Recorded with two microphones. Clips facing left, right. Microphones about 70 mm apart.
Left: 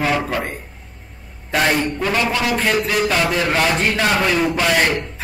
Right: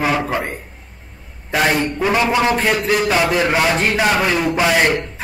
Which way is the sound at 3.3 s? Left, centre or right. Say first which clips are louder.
Right 2 dB; centre.